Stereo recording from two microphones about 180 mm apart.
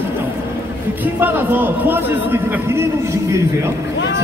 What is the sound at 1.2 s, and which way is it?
A man's voice, 10° right (ahead or behind).